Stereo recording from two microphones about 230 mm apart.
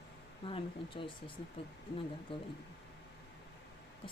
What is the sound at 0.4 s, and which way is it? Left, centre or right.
Speech, left.